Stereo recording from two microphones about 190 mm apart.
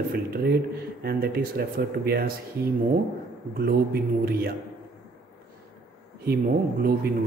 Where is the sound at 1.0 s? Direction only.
55° right (ahead or behind).